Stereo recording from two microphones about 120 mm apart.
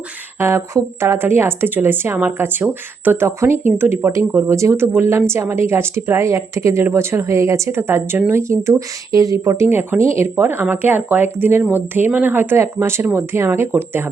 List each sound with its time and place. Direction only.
0.3 s speech: 20° right (ahead or behind)